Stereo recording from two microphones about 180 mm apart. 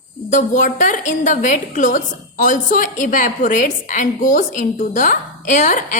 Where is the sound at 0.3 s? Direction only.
45° left (ahead or behind).